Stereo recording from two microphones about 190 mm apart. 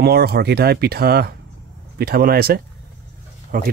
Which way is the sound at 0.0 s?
55° right (ahead or behind).